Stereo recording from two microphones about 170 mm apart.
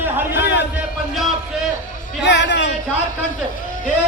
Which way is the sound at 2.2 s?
90° left.